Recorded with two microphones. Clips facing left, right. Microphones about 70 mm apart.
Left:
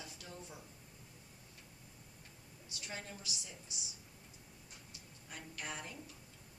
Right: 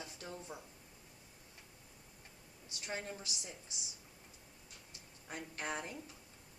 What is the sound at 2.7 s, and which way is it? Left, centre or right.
Speech, right.